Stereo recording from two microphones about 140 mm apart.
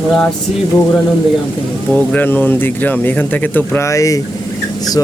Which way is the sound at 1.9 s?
10° left (ahead or behind).